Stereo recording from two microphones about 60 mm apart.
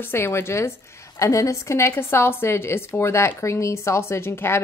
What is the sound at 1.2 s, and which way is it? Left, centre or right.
A woman's voice, left.